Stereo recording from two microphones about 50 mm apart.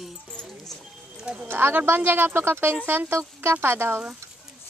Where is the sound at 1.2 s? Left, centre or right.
Centre.